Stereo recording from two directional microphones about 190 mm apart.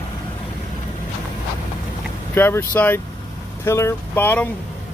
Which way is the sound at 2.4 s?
10° left (ahead or behind).